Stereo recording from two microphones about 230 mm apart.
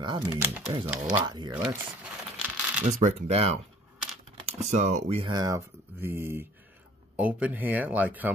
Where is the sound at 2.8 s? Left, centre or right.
Right; by 8.3 s centre.